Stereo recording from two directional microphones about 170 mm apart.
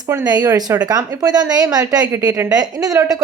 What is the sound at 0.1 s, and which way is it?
A woman's voice, 25° right (ahead or behind).